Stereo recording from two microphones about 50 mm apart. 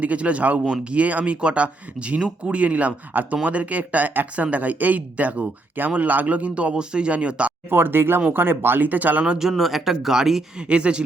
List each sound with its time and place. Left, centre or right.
0.0 s speech: right
7.7 s speech: right
9.4 s speech: centre
10.6 s speech: right